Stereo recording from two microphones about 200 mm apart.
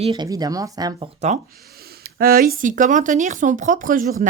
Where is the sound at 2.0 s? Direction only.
50° right (ahead or behind).